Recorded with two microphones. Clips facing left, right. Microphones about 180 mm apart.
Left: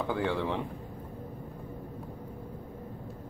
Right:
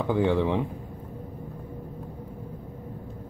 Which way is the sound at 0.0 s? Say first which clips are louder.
Right 7 dB; 15° right (ahead or behind).